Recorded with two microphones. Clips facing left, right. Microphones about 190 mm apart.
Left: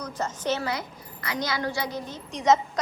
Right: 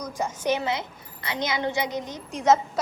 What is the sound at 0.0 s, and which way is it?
A woman's voice, 10° right (ahead or behind).